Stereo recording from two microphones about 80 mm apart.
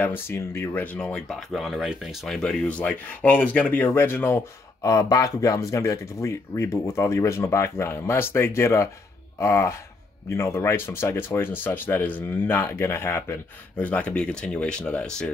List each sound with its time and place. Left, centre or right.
0.0 s speech: left
1.5 s speech: centre
2.2 s speech: centre
2.6 s speech: centre
4.8 s speech: left
13.7 s speech: centre